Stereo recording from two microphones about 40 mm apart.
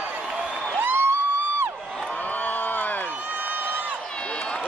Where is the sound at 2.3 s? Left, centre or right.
Left.